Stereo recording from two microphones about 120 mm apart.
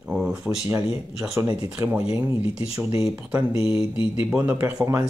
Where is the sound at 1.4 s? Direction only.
20° right (ahead or behind).